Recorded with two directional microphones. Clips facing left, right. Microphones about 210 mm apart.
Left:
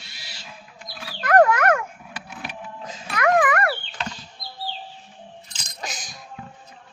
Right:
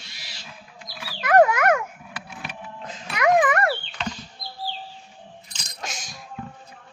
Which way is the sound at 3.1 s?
20° right (ahead or behind).